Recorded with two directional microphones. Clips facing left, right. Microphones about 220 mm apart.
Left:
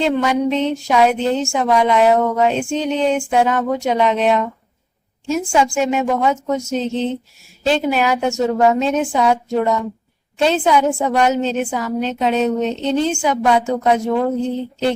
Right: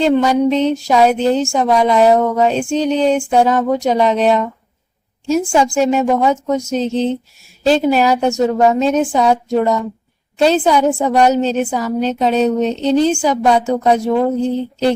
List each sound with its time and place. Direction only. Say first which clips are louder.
0.0 s speech: right 4 dB; 35° right (ahead or behind)